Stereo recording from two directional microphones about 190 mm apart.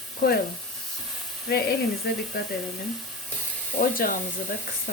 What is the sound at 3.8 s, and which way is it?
Speech, 45° left (ahead or behind).